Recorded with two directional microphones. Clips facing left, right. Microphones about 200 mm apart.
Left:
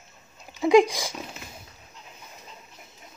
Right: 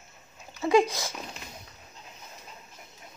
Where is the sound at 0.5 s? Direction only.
15° left (ahead or behind).